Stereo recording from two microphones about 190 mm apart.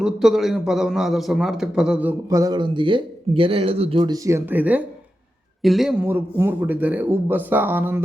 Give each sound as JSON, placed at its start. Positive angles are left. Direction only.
{"t": 0.0, "sound": "a man's voice", "side_deg": 0}
{"t": 6.0, "sound": "a man's voice", "side_deg": -10}